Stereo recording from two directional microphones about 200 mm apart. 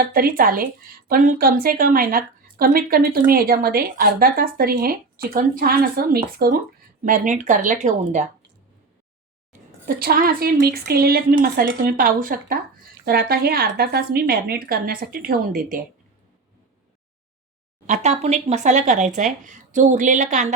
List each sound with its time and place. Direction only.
0.0 s speech: 45° right (ahead or behind)
9.5 s speech: 45° right (ahead or behind)
17.8 s speech: 35° right (ahead or behind)